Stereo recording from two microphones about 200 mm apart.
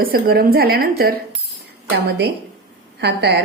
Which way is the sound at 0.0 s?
50° right (ahead or behind).